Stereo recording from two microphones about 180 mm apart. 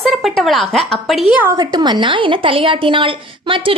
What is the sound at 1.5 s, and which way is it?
A woman's voice, 20° right (ahead or behind).